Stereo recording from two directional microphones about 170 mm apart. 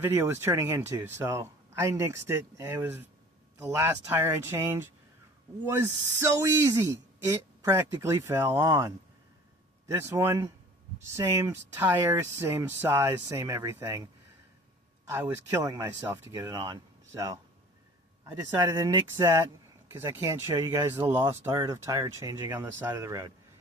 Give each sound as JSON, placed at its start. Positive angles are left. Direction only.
{"t": 0.0, "sound": "speech", "side_deg": -15}
{"t": 15.1, "sound": "speech", "side_deg": -15}